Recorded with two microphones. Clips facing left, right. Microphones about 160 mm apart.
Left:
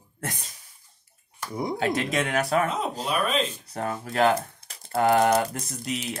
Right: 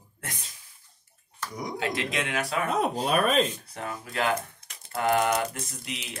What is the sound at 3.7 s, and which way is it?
Speech, 45° left (ahead or behind).